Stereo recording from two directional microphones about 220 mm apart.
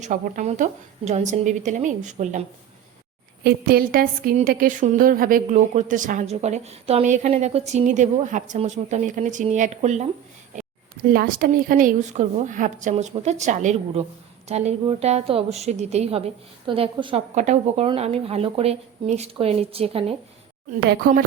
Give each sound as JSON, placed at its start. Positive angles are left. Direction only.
{"t": 0.0, "sound": "a woman's voice", "side_deg": -35}
{"t": 3.4, "sound": "a woman's voice", "side_deg": -40}
{"t": 11.1, "sound": "a woman's voice", "side_deg": -40}